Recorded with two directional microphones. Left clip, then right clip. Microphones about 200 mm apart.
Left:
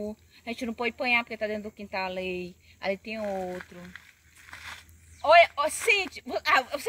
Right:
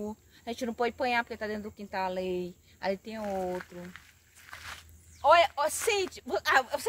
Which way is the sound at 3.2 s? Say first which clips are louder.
Right 2 dB; 25° right (ahead or behind).